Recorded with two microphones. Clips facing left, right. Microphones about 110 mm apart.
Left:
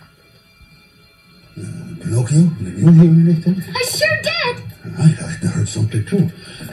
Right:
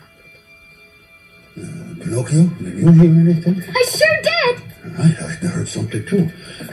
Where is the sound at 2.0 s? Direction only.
25° right (ahead or behind).